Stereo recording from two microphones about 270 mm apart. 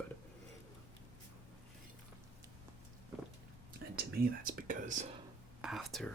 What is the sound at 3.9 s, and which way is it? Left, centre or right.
Whispering, right.